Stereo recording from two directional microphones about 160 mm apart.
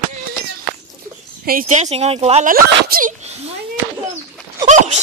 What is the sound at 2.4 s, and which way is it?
Speech, 65° right (ahead or behind).